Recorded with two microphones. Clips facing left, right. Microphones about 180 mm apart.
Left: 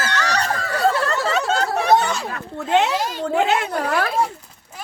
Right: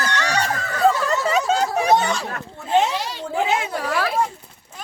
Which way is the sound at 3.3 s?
65° left (ahead or behind).